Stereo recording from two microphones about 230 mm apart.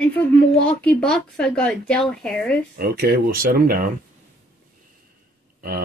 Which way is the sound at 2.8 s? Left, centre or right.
Right.